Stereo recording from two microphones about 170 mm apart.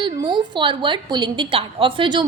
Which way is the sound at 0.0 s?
30° right (ahead or behind).